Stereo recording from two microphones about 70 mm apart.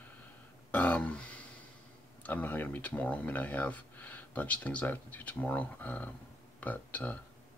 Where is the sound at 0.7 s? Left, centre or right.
Centre.